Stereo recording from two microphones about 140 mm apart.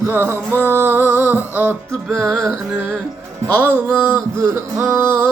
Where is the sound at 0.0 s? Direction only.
15° right (ahead or behind).